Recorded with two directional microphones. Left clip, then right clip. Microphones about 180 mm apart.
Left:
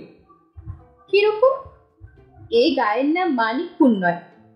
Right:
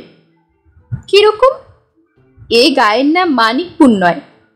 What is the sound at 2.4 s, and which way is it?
A woman's voice, 45° right (ahead or behind).